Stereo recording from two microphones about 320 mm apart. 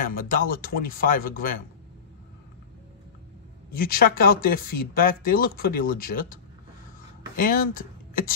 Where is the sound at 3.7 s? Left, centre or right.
Left.